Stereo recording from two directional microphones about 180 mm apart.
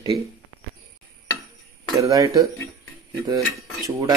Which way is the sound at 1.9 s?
20° right (ahead or behind).